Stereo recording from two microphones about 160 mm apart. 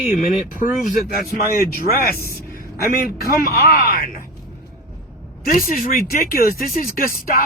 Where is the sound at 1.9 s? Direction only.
75° left (ahead or behind).